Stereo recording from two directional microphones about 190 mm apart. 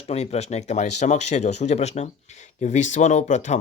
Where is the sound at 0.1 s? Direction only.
35° left (ahead or behind).